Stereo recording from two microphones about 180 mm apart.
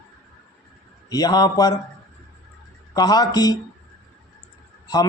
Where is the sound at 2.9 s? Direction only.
20° left (ahead or behind).